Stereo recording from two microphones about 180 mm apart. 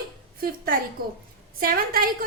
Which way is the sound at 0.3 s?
55° right (ahead or behind).